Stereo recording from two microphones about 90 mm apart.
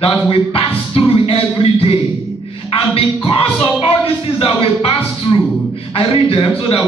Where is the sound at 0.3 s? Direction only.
90° left.